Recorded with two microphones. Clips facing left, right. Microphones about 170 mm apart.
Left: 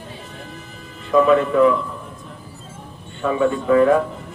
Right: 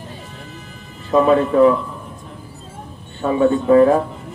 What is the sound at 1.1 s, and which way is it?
Speech, 35° right (ahead or behind).